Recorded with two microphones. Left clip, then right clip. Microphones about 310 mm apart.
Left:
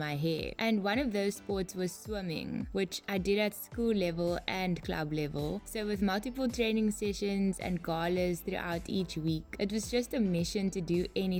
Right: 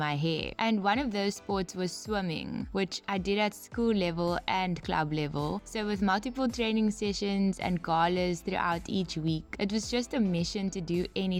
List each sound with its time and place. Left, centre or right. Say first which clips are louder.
0.0 s speech: right 3 dB; right